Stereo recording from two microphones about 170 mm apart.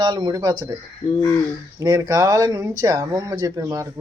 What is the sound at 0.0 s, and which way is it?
Speech, 25° right (ahead or behind).